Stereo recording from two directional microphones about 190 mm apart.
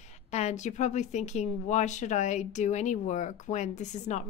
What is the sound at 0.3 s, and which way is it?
A woman's voice, 35° left (ahead or behind).